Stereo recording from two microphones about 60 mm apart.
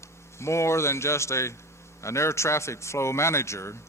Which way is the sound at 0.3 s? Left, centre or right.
Left.